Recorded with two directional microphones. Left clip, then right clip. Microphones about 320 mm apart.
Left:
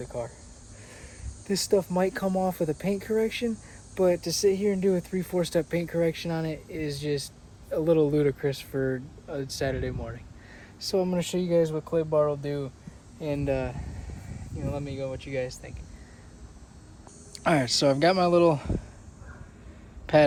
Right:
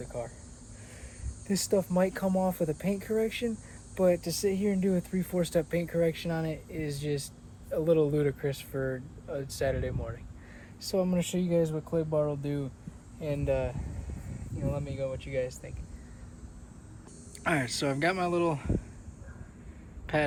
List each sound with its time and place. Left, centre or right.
0.0 s speech: left
1.5 s speech: left
17.3 s speech: centre
20.1 s a woman's voice: centre